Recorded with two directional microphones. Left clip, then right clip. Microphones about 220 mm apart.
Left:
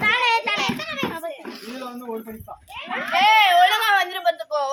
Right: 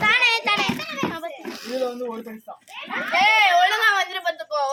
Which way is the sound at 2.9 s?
5° left (ahead or behind).